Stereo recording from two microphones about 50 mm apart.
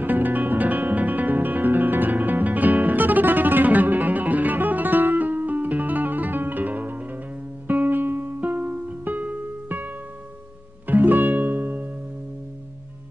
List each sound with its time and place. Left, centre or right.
0.0 s music: right